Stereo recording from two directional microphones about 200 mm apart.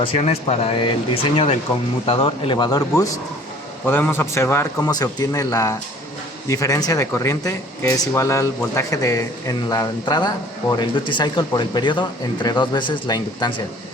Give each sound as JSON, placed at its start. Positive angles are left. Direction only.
{"t": 0.0, "sound": "speech", "side_deg": 30}
{"t": 3.8, "sound": "a man's voice", "side_deg": 10}